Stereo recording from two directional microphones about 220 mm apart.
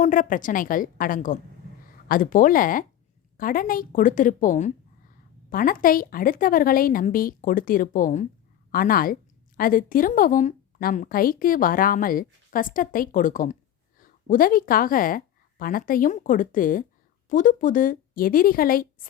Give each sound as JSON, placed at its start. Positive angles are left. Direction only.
{"t": 0.0, "sound": "a woman's voice", "side_deg": 35}